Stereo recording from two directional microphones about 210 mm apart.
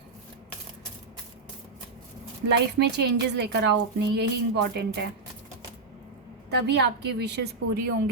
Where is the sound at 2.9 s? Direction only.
55° right (ahead or behind).